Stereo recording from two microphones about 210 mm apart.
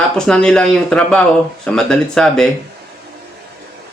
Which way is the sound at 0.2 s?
5° left (ahead or behind).